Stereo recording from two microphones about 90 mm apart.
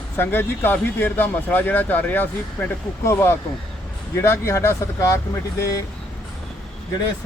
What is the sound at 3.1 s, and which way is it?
Speech, 35° left (ahead or behind).